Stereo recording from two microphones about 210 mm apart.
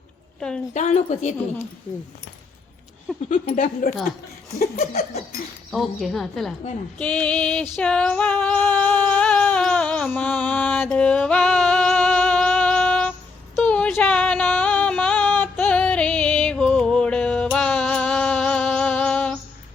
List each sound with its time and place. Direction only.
0.3 s a woman's voice: 5° left (ahead or behind)
0.7 s speech: 35° left (ahead or behind)
3.2 s speech: 35° left (ahead or behind)
5.7 s a woman's voice: centre (ahead or behind)
7.8 s a sound: 5° left (ahead or behind)
13.6 s female singing: 5° left (ahead or behind)